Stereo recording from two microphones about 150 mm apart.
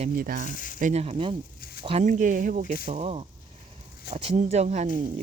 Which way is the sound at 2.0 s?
60° right (ahead or behind).